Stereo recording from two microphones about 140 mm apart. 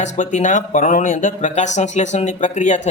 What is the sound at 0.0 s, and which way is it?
Speech, 60° left (ahead or behind).